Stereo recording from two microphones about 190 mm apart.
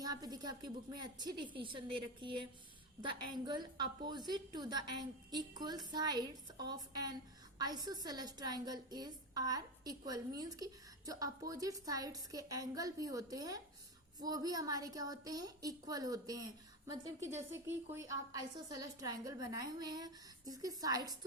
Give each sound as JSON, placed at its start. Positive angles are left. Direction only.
{"t": 0.0, "sound": "a woman's voice", "side_deg": -20}